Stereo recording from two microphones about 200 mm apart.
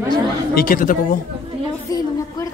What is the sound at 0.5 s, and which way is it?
Speech, 45° left (ahead or behind).